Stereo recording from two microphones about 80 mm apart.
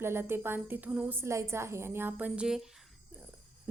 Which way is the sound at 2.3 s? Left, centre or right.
Centre.